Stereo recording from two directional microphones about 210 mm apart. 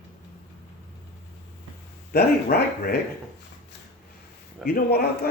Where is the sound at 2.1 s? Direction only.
50° left (ahead or behind).